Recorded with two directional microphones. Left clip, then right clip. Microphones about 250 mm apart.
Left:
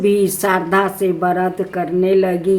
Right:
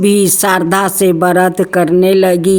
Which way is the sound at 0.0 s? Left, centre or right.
Right.